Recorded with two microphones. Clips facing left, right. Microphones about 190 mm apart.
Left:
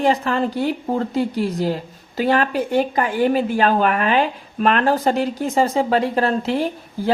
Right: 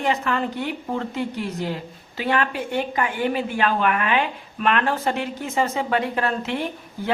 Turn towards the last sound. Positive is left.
turn(degrees=35)  # may be behind; listen again after turning